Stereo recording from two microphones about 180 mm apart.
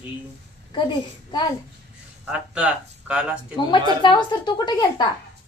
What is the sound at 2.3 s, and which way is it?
Speech, 5° right (ahead or behind).